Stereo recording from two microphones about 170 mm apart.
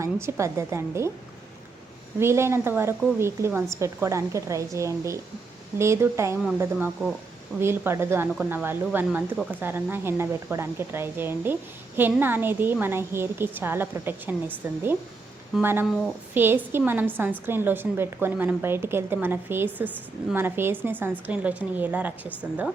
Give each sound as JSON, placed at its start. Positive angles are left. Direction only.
{"t": 0.0, "sound": "a woman's voice", "side_deg": -15}
{"t": 2.1, "sound": "a woman's voice", "side_deg": -15}